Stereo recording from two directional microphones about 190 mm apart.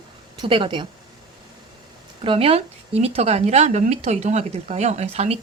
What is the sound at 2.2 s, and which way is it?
Speech, 30° right (ahead or behind).